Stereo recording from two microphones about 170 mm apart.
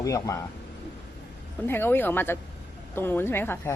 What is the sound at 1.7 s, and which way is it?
A woman's voice, 10° left (ahead or behind).